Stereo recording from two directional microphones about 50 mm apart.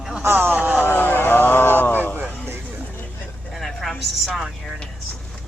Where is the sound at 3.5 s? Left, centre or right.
Centre.